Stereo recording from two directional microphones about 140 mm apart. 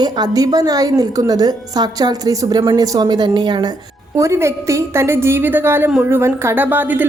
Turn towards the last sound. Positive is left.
turn(degrees=-15)  # may be behind; listen again after turning